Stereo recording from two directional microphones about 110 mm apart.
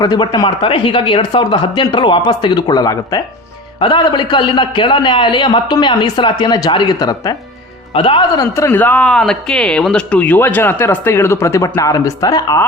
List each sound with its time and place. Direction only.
0.0 s speech: 40° left (ahead or behind)
3.8 s speech: 45° left (ahead or behind)
7.9 s speech: 50° left (ahead or behind)
8.5 s speech: 20° left (ahead or behind)